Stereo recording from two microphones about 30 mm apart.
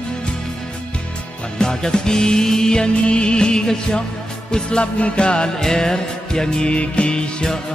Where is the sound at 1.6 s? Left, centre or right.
Left.